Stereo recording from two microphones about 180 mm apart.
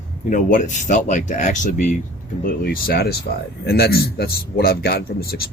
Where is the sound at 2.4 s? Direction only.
55° left (ahead or behind).